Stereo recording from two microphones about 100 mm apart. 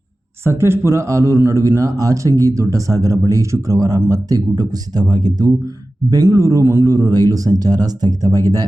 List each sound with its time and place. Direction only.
0.4 s a man's voice: 25° right (ahead or behind)